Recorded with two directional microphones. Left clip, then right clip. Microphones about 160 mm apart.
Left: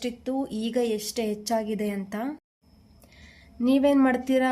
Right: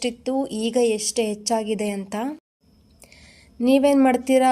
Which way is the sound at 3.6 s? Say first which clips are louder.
Right 4 dB; 20° right (ahead or behind).